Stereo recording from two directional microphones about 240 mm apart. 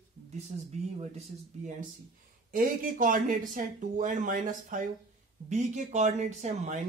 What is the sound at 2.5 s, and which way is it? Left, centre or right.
Speech, right.